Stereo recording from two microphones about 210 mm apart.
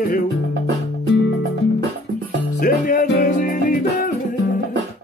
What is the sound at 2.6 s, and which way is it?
Music, 40° left (ahead or behind).